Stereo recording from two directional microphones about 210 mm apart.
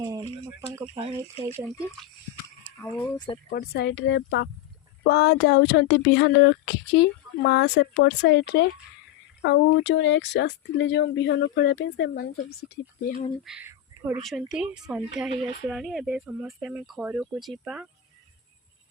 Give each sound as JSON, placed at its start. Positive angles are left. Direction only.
{"t": 0.0, "sound": "speech", "side_deg": -20}
{"t": 2.7, "sound": "speech", "side_deg": 10}
{"t": 3.5, "sound": "speech", "side_deg": 50}
{"t": 13.4, "sound": "speech", "side_deg": -5}